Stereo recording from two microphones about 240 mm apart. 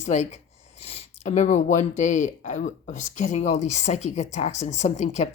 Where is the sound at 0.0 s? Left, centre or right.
Left.